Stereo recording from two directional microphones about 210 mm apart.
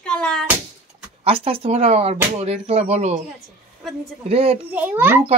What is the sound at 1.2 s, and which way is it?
Speech, 25° right (ahead or behind).